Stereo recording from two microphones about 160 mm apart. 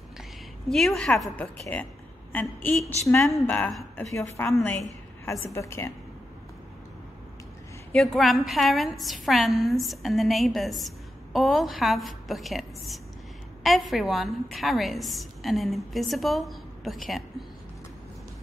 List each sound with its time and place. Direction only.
0.7 s a woman's voice: centre (ahead or behind)
5.2 s a woman's voice: 20° left (ahead or behind)
7.9 s a woman's voice: 5° left (ahead or behind)